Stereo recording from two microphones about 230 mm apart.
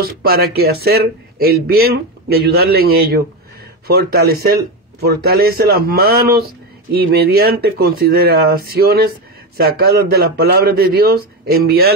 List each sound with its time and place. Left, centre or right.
0.0 s speech: right